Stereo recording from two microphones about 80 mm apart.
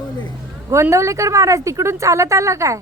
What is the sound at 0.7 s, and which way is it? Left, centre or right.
A woman's voice, right.